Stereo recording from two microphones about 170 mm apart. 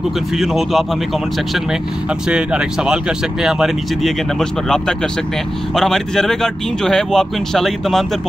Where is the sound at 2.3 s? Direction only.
5° right (ahead or behind).